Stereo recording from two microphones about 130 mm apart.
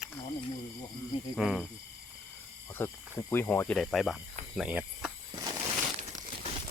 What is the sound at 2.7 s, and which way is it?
Speech, 20° left (ahead or behind).